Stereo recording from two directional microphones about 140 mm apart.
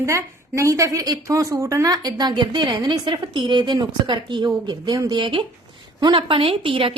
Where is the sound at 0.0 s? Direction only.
20° right (ahead or behind).